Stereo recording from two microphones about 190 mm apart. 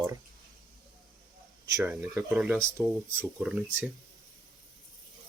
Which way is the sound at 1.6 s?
15° right (ahead or behind).